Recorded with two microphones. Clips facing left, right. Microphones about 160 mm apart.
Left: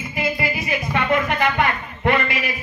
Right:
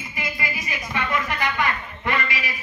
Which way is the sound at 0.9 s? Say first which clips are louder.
Left 5 dB; 55° left (ahead or behind).